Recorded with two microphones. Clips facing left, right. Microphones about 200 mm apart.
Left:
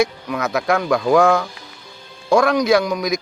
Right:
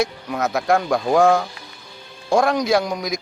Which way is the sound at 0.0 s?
65° left (ahead or behind).